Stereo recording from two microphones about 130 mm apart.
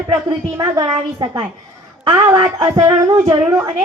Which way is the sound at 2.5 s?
30° right (ahead or behind).